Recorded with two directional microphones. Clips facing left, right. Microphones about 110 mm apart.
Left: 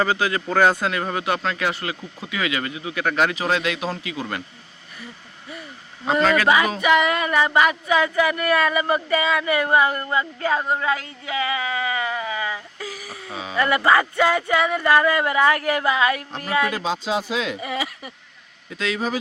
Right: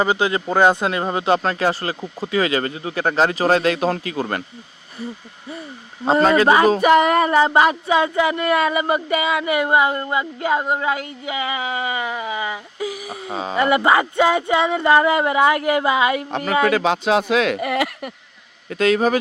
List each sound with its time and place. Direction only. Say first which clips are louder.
0.0 s speech: right 3 dB; 20° right (ahead or behind)
1.4 s speech: right 5 dB; 40° right (ahead or behind)
6.1 s speech: right 4 dB; 35° right (ahead or behind); by 13.3 s 20° right (ahead or behind)
13.3 s speech: right 6 dB; 40° right (ahead or behind)
13.6 s speech: right 2 dB; 20° right (ahead or behind)
16.6 s speech: right 7 dB; 70° right (ahead or behind); by 19.2 s 55° right (ahead or behind)